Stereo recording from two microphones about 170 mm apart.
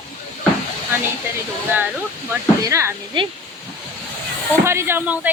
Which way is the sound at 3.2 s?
30° right (ahead or behind).